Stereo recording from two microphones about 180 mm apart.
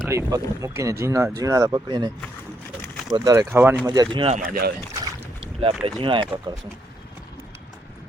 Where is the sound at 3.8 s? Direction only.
20° right (ahead or behind).